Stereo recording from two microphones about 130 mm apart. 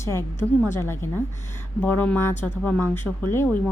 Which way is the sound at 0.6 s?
20° left (ahead or behind).